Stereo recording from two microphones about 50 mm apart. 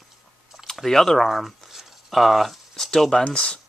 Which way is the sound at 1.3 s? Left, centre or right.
Centre.